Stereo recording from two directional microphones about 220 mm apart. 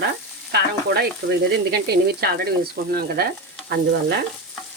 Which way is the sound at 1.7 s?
45° right (ahead or behind).